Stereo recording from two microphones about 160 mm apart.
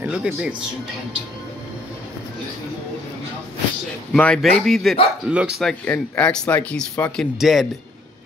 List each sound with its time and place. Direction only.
0.0 s speech: 5° right (ahead or behind)
4.1 s speech: 5° left (ahead or behind)